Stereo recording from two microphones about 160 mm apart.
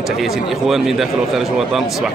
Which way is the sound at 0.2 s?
Centre (ahead or behind).